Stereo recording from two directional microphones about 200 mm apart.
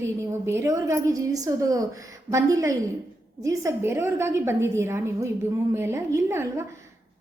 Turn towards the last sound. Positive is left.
turn(degrees=-15)  # may be behind; listen again after turning